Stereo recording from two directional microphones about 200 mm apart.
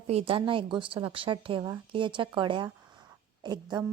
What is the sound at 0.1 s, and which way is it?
A woman's voice, 30° right (ahead or behind).